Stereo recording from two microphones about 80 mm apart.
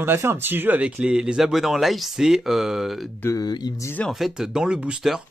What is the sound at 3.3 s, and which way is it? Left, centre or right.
Speech, left.